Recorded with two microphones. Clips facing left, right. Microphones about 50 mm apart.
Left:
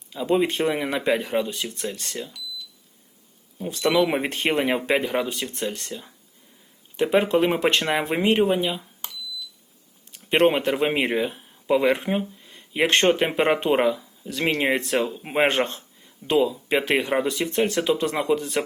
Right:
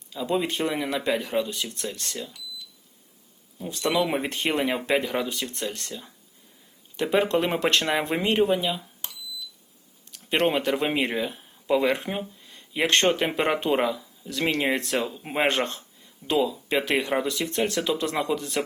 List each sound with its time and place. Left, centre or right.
0.1 s speech: centre
3.6 s speech: left
3.9 s speech: centre
4.3 s speech: left
4.5 s speech: centre
6.9 s speech: centre
10.2 s speech: centre
14.9 s speech: centre
15.5 s speech: left
16.4 s speech: centre
17.2 s speech: left
18.1 s speech: centre
18.3 s speech: left